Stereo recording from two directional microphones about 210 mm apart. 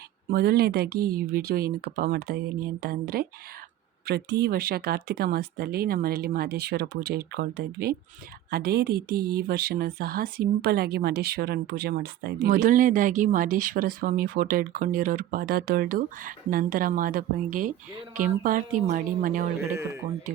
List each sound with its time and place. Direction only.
0.3 s a woman's voice: 45° right (ahead or behind)
19.5 s speech: 15° right (ahead or behind)